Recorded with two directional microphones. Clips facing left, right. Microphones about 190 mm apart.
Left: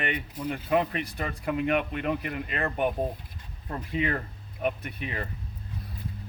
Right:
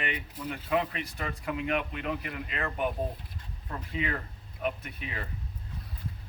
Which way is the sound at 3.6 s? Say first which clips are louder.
Left 5 dB; 35° left (ahead or behind).